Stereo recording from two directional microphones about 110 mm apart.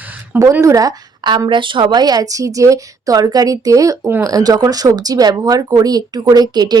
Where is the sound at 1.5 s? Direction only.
50° right (ahead or behind).